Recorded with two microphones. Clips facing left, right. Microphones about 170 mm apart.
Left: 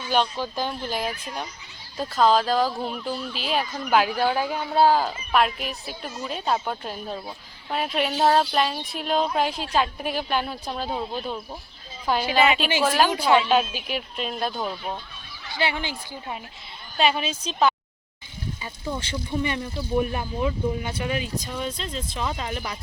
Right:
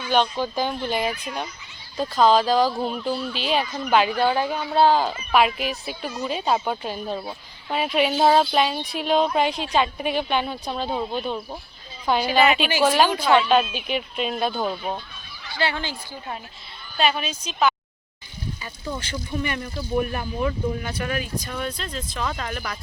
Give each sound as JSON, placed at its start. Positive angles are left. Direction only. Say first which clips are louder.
{"t": 0.1, "sound": "speech", "louder": "right 2 dB", "side_deg": 0}
{"t": 15.5, "sound": "speech", "louder": "right 1 dB", "side_deg": 15}
{"t": 18.9, "sound": "speech", "louder": "left 1 dB", "side_deg": 25}